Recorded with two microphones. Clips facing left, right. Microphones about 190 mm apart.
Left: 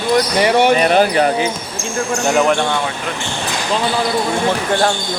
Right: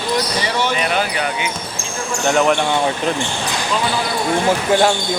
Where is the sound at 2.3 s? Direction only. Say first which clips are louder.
Even; 5° left (ahead or behind).